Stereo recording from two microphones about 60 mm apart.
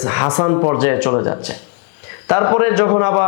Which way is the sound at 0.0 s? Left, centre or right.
Left.